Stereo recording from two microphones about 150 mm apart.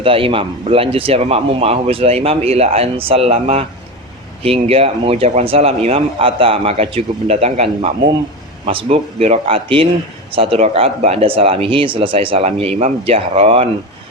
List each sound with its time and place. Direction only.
0.0 s speech: 35° right (ahead or behind)